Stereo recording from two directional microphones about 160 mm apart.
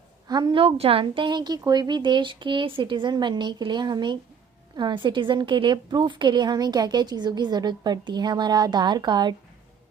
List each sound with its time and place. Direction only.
0.3 s a woman's voice: 25° right (ahead or behind)